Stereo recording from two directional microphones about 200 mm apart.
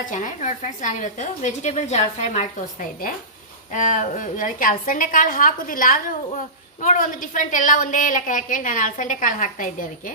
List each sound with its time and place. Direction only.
0.0 s a woman's voice: 40° left (ahead or behind)
3.7 s a woman's voice: 40° left (ahead or behind)